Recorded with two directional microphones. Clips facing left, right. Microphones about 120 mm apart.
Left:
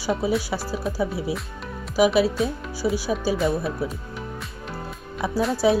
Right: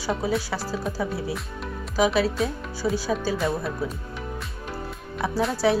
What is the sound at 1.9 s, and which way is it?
Speech, 15° left (ahead or behind).